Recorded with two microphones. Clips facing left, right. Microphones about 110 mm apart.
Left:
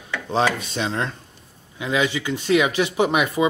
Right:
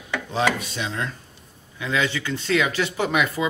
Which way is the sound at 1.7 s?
20° left (ahead or behind).